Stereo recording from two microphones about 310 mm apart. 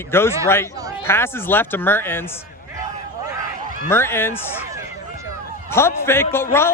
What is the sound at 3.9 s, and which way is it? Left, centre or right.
Speech, centre.